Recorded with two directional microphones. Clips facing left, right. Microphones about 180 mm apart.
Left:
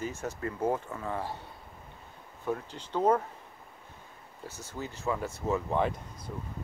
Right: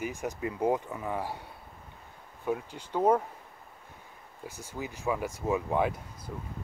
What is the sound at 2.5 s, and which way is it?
Speech, 10° right (ahead or behind).